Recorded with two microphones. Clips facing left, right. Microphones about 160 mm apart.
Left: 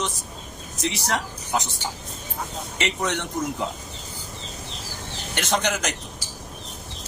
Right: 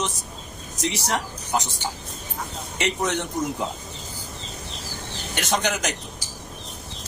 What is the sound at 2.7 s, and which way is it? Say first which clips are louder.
Speech: right 2 dB; 15° right (ahead or behind).